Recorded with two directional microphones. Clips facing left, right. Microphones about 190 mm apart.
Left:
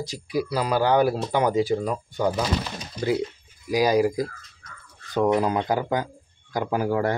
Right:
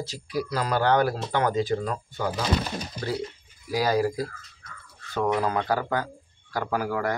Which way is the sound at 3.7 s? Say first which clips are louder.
Left 4 dB; 15° left (ahead or behind).